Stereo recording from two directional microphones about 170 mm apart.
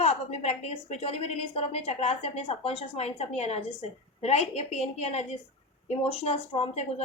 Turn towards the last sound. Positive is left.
turn(degrees=35)  # may be behind; listen again after turning